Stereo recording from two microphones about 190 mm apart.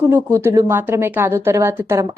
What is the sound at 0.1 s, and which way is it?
A woman's voice, 15° right (ahead or behind).